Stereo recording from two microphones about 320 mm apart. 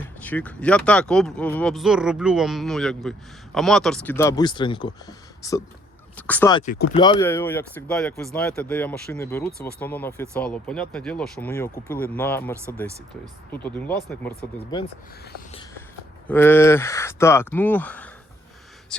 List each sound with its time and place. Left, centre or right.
0.0 s speech: centre
6.6 s speech: left
6.9 s speech: centre
16.2 s speech: centre